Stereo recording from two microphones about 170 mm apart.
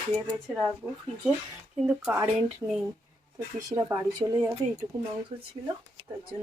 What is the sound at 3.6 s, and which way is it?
Speech, 20° right (ahead or behind).